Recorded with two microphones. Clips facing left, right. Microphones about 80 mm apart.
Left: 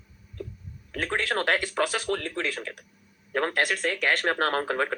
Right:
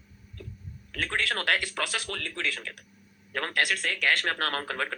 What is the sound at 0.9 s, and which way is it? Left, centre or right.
Speech, left.